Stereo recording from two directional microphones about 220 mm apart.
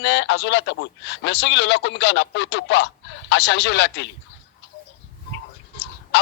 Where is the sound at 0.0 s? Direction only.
55° left (ahead or behind).